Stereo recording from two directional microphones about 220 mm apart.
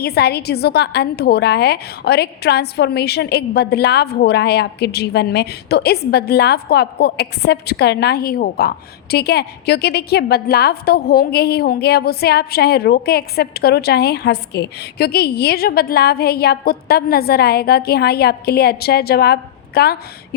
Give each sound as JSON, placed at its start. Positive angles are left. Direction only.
{"t": 0.0, "sound": "a woman's voice", "side_deg": 45}